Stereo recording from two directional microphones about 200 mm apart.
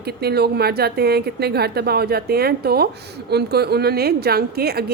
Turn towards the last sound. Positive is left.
turn(degrees=-50)  # may be behind; listen again after turning